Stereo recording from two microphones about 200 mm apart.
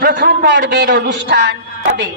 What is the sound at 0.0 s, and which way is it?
A man's voice, 50° right (ahead or behind).